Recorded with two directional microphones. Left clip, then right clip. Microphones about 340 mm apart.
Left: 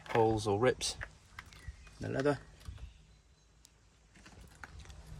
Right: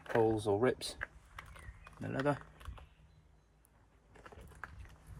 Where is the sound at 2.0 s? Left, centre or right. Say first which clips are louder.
Left 2 dB; centre.